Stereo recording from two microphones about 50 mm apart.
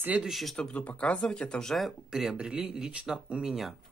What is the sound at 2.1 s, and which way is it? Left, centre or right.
Speech, centre.